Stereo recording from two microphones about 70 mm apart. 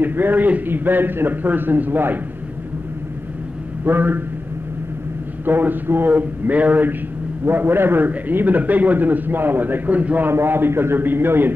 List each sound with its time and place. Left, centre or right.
0.0 s a man's voice: right
3.8 s a man's voice: right
5.4 s a man's voice: right